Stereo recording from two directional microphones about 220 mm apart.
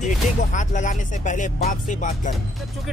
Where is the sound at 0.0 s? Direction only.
35° left (ahead or behind).